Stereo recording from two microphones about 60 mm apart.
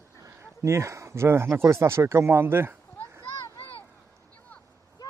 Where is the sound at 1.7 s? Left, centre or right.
Right.